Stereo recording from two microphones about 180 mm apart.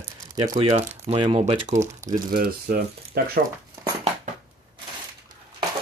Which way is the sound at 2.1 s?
60° right (ahead or behind).